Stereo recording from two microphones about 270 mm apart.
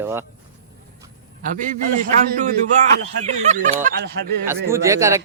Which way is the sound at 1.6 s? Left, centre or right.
Right.